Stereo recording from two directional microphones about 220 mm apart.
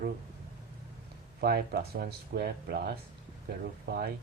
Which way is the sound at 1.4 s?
45° right (ahead or behind).